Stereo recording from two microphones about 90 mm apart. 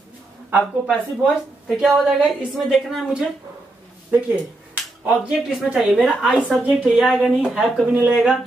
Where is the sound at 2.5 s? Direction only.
Centre (ahead or behind).